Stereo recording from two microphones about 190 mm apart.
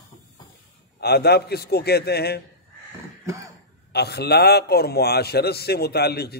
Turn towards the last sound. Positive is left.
turn(degrees=55)  # may be behind; listen again after turning